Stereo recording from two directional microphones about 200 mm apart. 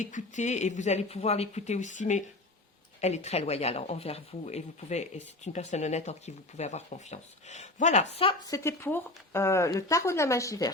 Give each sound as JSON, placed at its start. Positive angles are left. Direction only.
{"t": 0.0, "sound": "speech", "side_deg": 40}